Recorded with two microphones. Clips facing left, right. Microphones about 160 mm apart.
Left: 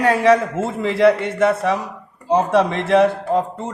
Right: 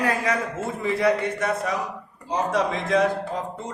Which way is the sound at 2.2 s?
65° left (ahead or behind).